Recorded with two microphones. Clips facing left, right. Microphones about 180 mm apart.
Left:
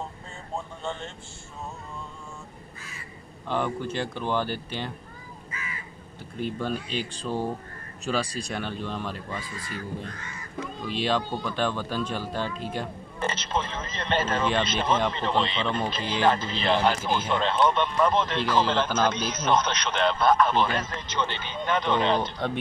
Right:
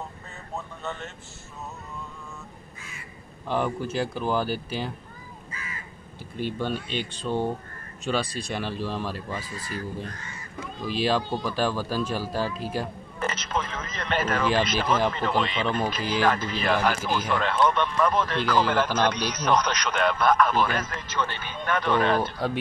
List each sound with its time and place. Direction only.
0.6 s speech: 30° left (ahead or behind)
3.4 s speech: 5° right (ahead or behind)
5.5 s crow: 35° right (ahead or behind)
6.3 s speech: centre (ahead or behind)
10.9 s speech: 5° right (ahead or behind)
13.2 s speech: 30° left (ahead or behind)
22.2 s speech: 5° right (ahead or behind)